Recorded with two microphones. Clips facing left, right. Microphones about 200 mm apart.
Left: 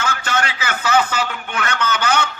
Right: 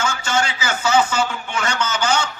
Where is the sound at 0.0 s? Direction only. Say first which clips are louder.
Right 1 dB; 60° left (ahead or behind).